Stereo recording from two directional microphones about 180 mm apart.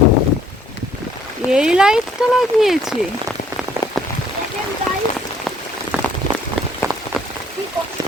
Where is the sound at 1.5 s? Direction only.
5° right (ahead or behind).